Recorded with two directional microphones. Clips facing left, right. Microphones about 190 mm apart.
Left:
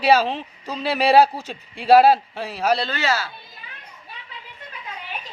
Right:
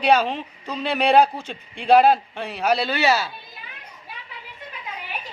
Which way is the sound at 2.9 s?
15° right (ahead or behind).